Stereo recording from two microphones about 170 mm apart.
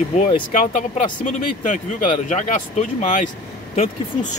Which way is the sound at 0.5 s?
45° left (ahead or behind).